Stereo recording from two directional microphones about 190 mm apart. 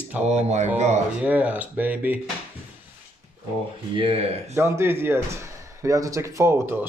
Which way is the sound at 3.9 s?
30° right (ahead or behind).